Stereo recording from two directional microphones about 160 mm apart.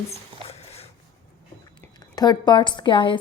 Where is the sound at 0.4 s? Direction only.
40° left (ahead or behind).